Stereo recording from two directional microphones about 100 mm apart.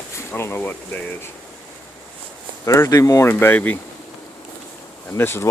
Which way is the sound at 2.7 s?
25° left (ahead or behind).